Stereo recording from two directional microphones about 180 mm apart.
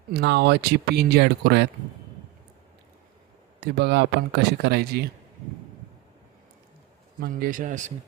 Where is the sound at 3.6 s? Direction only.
65° right (ahead or behind).